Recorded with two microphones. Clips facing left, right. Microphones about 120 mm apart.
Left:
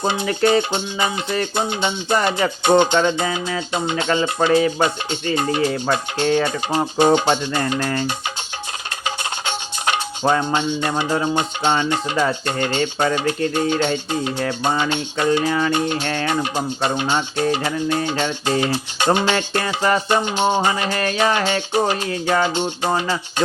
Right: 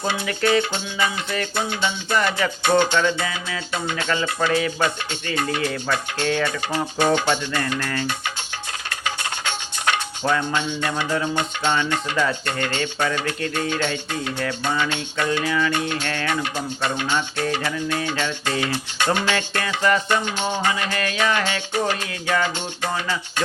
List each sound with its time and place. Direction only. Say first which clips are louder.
0.0 s music: left 4 dB; 20° left (ahead or behind)
3.2 s music: left 6 dB; 35° left (ahead or behind)
3.7 s music: left 3 dB; 20° left (ahead or behind)
9.0 s music: left 2 dB; 20° left (ahead or behind)
15.4 s music: left 2 dB; 35° left (ahead or behind)
15.7 s music: left 4 dB; 20° left (ahead or behind)
19.6 s music: even; 35° left (ahead or behind)
20.2 s music: left 5 dB; 20° left (ahead or behind); by 21.2 s 40° left (ahead or behind)
21.8 s music: left 4 dB; 25° left (ahead or behind)